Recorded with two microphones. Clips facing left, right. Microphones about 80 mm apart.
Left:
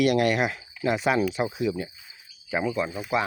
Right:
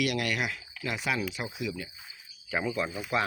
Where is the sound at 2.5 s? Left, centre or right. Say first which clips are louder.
Left 4 dB; centre.